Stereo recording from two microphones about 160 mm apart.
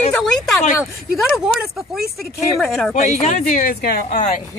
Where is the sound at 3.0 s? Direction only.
50° left (ahead or behind); by 4.2 s 70° left (ahead or behind).